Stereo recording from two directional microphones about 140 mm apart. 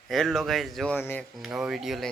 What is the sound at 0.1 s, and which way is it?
Speech, 5° left (ahead or behind).